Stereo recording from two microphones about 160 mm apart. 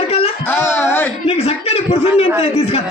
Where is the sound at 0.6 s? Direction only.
15° left (ahead or behind).